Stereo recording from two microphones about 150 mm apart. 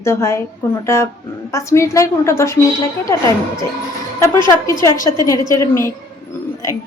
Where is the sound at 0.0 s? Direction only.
20° left (ahead or behind).